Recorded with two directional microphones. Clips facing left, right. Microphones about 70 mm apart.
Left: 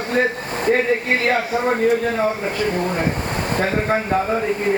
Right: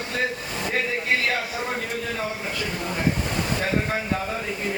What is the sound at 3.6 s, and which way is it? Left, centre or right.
Speech, left.